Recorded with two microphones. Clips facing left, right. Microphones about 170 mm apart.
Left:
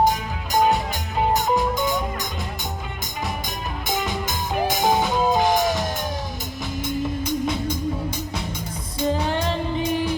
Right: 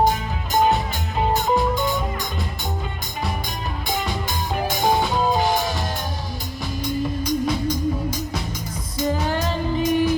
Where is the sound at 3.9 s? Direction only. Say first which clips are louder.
Left 1 dB; 20° left (ahead or behind).